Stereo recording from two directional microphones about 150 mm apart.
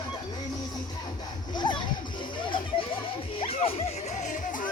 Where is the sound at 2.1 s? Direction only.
35° left (ahead or behind).